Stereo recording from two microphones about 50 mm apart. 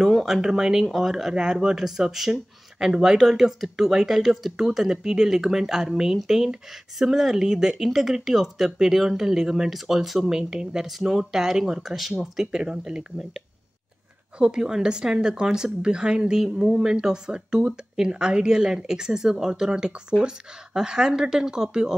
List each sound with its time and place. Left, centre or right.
0.0 s a sound: centre
0.4 s a woman's voice: centre
12.4 s a woman's voice: centre
14.4 s a woman's voice: centre